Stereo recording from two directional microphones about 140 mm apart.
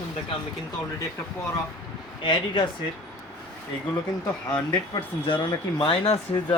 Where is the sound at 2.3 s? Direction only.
35° left (ahead or behind).